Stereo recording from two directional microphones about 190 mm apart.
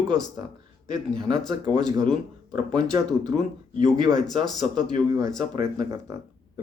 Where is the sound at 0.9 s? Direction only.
20° right (ahead or behind).